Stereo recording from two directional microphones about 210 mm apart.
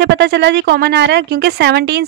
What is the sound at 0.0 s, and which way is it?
A woman's voice, 55° right (ahead or behind).